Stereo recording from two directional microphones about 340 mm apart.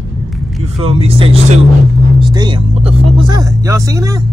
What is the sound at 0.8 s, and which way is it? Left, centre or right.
Speech, centre.